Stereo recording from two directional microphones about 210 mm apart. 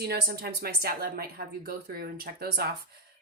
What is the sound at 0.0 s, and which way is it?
Speech, 50° right (ahead or behind).